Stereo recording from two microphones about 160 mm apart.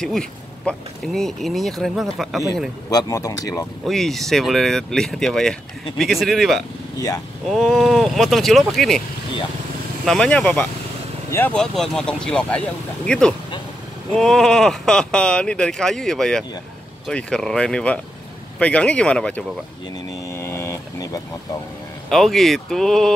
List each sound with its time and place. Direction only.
0.0 s speech: 5° left (ahead or behind)
2.9 s speech: 25° left (ahead or behind)
3.8 s speech: centre (ahead or behind)
10.0 s speech: 5° left (ahead or behind)
20.2 s vehicle: 15° left (ahead or behind)
22.1 s speech: centre (ahead or behind)